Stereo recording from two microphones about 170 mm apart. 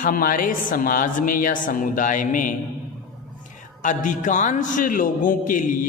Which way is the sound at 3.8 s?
50° left (ahead or behind).